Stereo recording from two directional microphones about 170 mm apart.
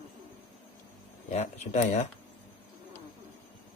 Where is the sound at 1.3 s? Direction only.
40° left (ahead or behind).